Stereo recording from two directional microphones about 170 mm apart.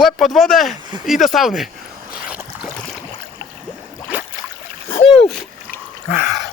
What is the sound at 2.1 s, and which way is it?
Boat, 5° right (ahead or behind).